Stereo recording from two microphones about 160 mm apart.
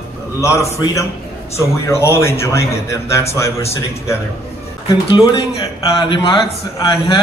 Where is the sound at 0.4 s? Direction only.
20° left (ahead or behind).